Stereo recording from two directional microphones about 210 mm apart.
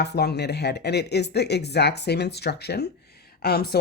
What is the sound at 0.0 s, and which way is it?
Speech, 50° left (ahead or behind).